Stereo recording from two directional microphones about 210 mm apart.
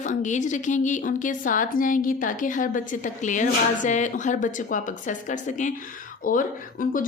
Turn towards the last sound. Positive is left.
turn(degrees=40)  # may be behind; listen again after turning